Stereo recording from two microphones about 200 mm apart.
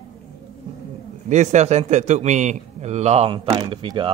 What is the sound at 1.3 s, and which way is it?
A man's voice, 35° right (ahead or behind).